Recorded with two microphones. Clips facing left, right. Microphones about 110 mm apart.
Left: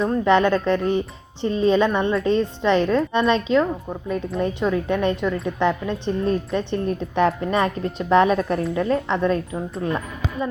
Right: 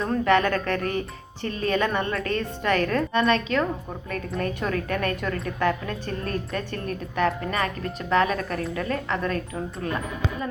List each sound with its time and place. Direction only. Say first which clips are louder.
0.0 s a woman's voice: left 4 dB; 20° left (ahead or behind)